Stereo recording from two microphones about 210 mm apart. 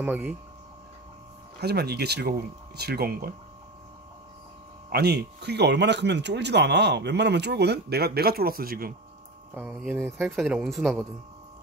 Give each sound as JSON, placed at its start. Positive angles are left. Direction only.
{"t": 0.0, "sound": "speech", "side_deg": -10}
{"t": 1.6, "sound": "speech", "side_deg": -50}
{"t": 4.8, "sound": "speech", "side_deg": -50}
{"t": 9.5, "sound": "speech", "side_deg": -5}